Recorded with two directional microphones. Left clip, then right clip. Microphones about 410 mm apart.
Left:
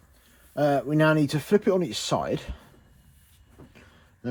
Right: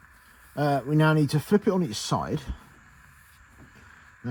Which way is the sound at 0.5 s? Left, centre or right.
Right.